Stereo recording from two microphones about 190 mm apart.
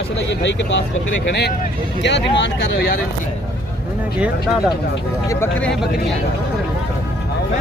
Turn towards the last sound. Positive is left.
turn(degrees=15)  # may be behind; listen again after turning